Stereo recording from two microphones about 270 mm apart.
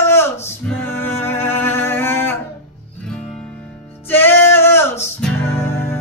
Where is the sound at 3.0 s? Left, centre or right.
Centre.